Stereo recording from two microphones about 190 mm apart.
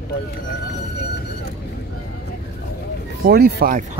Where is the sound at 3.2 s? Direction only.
55° right (ahead or behind).